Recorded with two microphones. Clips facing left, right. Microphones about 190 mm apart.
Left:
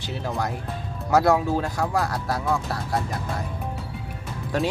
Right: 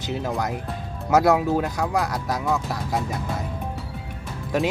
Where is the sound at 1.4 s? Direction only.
15° right (ahead or behind).